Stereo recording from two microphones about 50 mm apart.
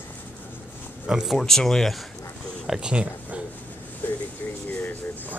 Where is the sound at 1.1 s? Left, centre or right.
Centre.